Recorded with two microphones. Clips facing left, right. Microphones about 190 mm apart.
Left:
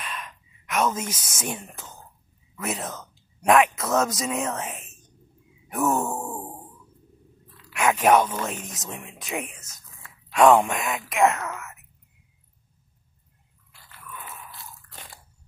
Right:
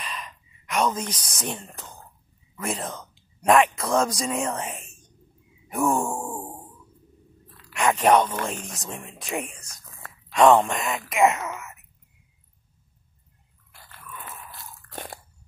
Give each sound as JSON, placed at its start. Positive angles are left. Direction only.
{"t": 0.0, "sound": "gasp", "side_deg": 0}
{"t": 1.0, "sound": "speech", "side_deg": 25}
{"t": 1.4, "sound": "speech", "side_deg": 5}
{"t": 5.7, "sound": "a sound", "side_deg": 0}
{"t": 7.7, "sound": "speech", "side_deg": 5}
{"t": 14.9, "sound": "biting", "side_deg": -55}